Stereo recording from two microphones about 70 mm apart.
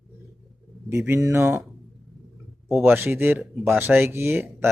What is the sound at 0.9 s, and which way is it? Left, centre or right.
Speech, right.